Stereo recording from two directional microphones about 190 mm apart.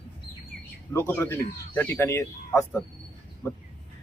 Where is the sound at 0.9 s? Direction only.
10° left (ahead or behind).